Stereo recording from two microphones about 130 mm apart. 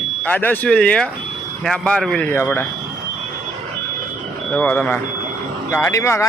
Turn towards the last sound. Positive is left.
turn(degrees=20)  # may be behind; listen again after turning